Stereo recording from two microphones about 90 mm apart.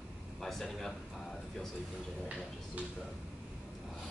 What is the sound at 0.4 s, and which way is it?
Speech, 5° left (ahead or behind).